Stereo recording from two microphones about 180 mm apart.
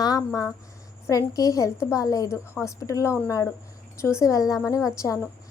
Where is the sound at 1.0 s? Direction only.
15° left (ahead or behind).